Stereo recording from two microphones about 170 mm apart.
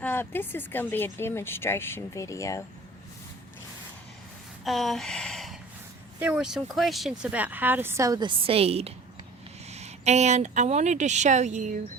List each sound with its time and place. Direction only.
0.0 s speech: 10° left (ahead or behind)
4.6 s a sound: centre (ahead or behind)
6.1 s speech: 5° right (ahead or behind); by 11.8 s 45° right (ahead or behind)